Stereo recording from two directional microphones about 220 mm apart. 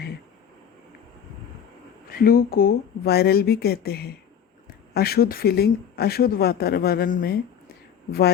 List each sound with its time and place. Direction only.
2.1 s speech: 40° left (ahead or behind)